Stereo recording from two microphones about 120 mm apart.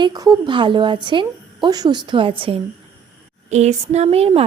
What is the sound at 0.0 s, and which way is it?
A woman's voice, 35° right (ahead or behind).